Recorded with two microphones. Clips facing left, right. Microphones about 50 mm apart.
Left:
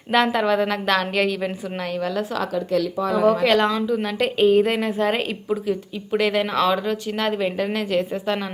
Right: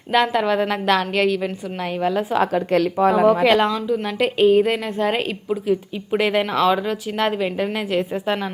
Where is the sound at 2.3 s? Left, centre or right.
Right.